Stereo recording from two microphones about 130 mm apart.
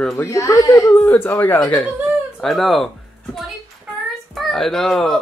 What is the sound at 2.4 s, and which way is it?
Speech, centre (ahead or behind).